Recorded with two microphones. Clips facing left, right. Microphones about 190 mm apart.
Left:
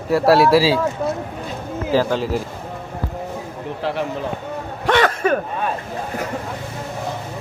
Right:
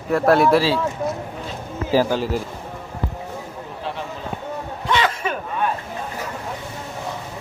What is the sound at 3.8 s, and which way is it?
Speech, 80° left.